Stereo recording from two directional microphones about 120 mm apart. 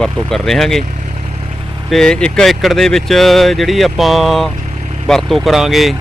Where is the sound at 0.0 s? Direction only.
5° left (ahead or behind).